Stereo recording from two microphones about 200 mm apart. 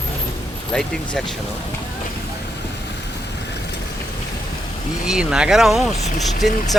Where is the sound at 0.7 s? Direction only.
Centre (ahead or behind).